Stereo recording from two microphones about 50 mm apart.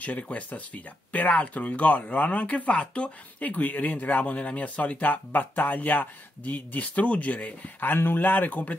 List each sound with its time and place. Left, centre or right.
0.0 s speech: left
7.9 s speech: left